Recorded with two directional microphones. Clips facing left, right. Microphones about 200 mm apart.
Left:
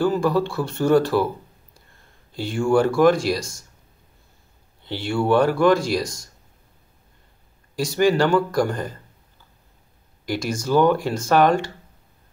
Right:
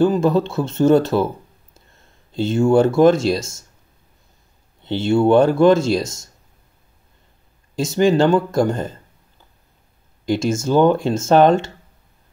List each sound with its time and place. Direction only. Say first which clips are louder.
0.0 s speech: right 4 dB; 20° right (ahead or behind)
4.8 s speech: right 6 dB; 25° right (ahead or behind)
7.7 s speech: right 3 dB; 25° right (ahead or behind)
10.2 s speech: right 6 dB; 25° right (ahead or behind)